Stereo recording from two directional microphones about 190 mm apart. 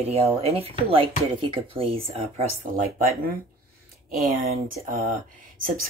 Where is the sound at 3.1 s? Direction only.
50° right (ahead or behind).